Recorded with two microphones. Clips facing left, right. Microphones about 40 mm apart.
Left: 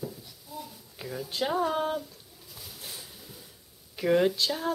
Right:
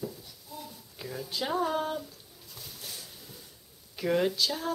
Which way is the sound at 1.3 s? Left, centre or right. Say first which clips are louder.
Left 2 dB; centre.